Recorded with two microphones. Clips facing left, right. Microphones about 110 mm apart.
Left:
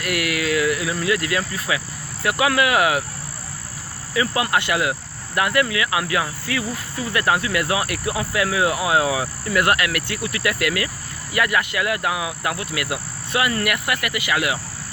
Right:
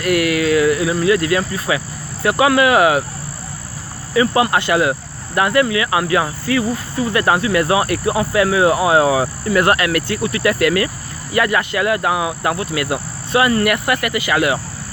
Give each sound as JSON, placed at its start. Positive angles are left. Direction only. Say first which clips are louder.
{"t": 0.0, "sound": "speech", "louder": "right 8 dB", "side_deg": -30}
{"t": 4.1, "sound": "speech", "louder": "right 6 dB", "side_deg": -30}